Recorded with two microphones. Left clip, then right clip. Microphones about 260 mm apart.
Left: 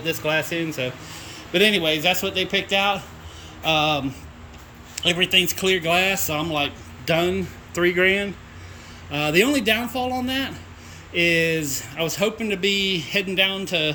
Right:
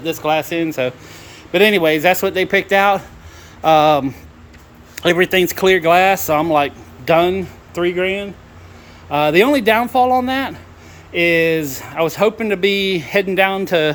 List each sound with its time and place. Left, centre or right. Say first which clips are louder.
0.0 s speech: right 5 dB; centre
5.0 s speech: right 5 dB; centre